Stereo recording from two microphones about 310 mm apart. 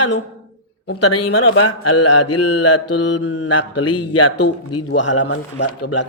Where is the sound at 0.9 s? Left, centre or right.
Left.